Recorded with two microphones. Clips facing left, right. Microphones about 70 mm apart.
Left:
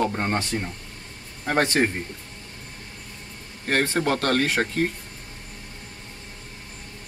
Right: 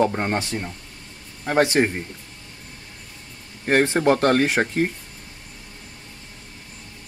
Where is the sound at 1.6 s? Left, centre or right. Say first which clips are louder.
Right 3 dB; centre.